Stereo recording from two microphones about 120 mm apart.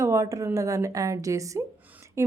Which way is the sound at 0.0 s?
25° right (ahead or behind).